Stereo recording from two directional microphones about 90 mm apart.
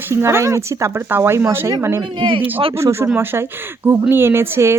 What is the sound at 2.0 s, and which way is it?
Speech, 65° right (ahead or behind).